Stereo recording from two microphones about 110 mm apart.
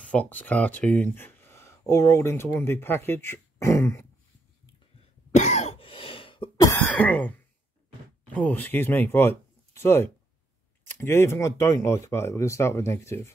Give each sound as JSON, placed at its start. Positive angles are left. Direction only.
{"t": 0.1, "sound": "speech", "side_deg": 15}
{"t": 5.3, "sound": "cough", "side_deg": 90}
{"t": 5.8, "sound": "throat clearing", "side_deg": 55}
{"t": 6.5, "sound": "cough", "side_deg": 35}
{"t": 6.8, "sound": "throat clearing", "side_deg": 15}
{"t": 8.4, "sound": "speech", "side_deg": 15}